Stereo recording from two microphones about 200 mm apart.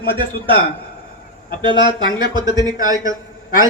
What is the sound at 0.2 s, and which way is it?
Speech, 25° right (ahead or behind).